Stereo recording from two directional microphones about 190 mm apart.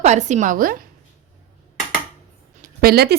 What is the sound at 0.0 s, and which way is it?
Speech, 40° right (ahead or behind).